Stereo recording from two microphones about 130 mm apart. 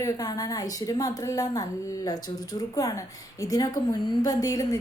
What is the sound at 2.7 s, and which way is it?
A woman's voice, 25° left (ahead or behind).